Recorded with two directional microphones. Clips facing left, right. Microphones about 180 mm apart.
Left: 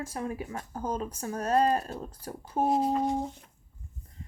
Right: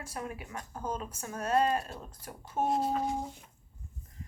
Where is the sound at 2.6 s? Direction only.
Centre (ahead or behind).